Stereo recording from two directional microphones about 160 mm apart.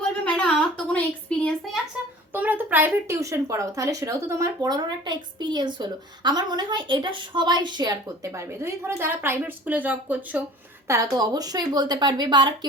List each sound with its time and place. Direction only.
0.0 s a sound: 5° left (ahead or behind)
2.3 s speech: 10° right (ahead or behind)
10.8 s speech: 20° right (ahead or behind)